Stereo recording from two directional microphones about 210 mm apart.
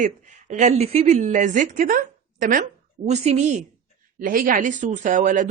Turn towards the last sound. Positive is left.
turn(degrees=-40)  # may be behind; listen again after turning